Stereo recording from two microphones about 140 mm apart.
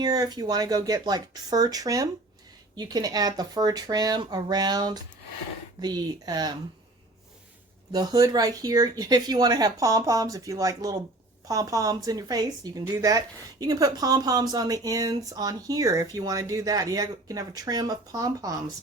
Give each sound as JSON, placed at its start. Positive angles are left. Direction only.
{"t": 0.0, "sound": "a woman's voice", "side_deg": -30}
{"t": 7.9, "sound": "a woman's voice", "side_deg": -25}